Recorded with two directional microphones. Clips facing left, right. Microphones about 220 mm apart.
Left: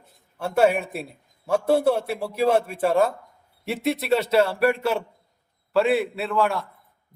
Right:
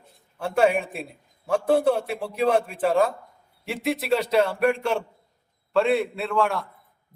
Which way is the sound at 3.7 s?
Centre (ahead or behind).